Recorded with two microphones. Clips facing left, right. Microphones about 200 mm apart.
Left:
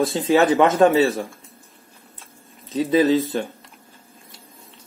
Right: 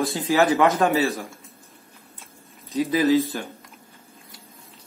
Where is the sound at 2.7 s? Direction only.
25° left (ahead or behind).